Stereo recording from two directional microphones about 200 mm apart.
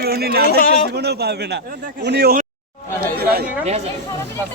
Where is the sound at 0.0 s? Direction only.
50° right (ahead or behind).